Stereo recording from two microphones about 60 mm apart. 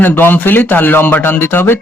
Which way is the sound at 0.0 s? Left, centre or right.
Left.